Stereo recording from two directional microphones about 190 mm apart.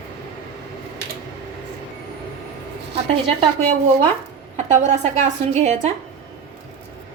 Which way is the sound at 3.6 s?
40° right (ahead or behind).